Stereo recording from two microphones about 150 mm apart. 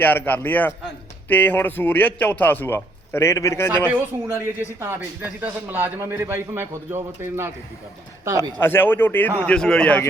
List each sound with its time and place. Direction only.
0.0 s a man's voice: 10° left (ahead or behind)
3.8 s a man's voice: 15° right (ahead or behind)
8.5 s a man's voice: 15° left (ahead or behind)